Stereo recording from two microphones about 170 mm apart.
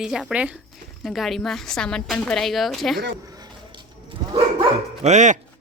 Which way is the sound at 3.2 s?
25° right (ahead or behind).